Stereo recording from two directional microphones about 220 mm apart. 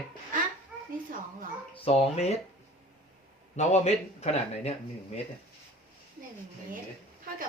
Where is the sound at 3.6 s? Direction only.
30° left (ahead or behind).